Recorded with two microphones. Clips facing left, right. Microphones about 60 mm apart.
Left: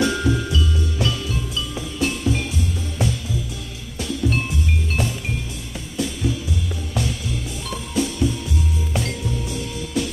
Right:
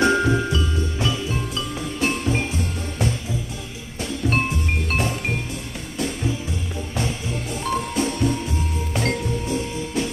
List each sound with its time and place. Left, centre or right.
0.0 s music: right
4.3 s music: right
7.0 s music: right